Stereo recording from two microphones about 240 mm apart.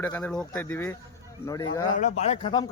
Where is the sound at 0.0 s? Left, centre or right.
Centre.